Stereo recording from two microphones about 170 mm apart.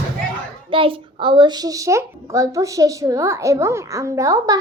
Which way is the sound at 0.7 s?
30° right (ahead or behind).